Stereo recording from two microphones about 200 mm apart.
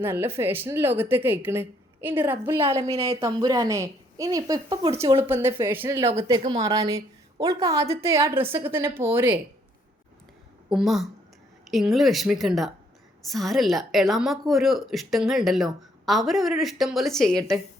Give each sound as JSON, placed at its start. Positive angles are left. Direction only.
{"t": 0.0, "sound": "a woman's voice", "side_deg": -10}
{"t": 2.9, "sound": "speech", "side_deg": -30}
{"t": 3.2, "sound": "a woman's voice", "side_deg": -20}
{"t": 5.2, "sound": "a woman's voice", "side_deg": -10}
{"t": 10.7, "sound": "a woman's voice", "side_deg": 0}